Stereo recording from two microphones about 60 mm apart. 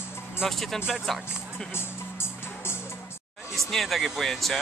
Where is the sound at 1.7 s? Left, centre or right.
Left.